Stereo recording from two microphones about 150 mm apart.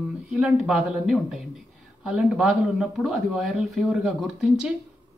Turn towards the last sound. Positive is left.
turn(degrees=-5)  # may be behind; listen again after turning